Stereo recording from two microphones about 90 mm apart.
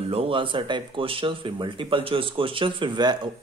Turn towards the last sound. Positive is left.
turn(degrees=-55)  # may be behind; listen again after turning